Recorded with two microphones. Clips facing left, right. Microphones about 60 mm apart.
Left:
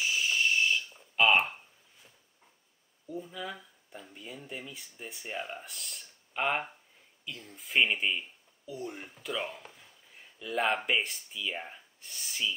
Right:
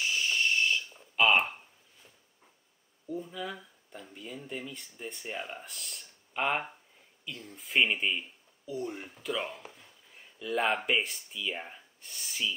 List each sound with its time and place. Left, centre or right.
0.0 s owl: centre
3.1 s speech: centre